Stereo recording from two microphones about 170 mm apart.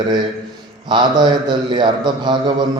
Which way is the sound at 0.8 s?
25° right (ahead or behind).